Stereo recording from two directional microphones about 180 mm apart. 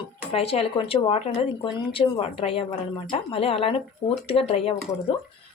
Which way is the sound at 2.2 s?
30° left (ahead or behind).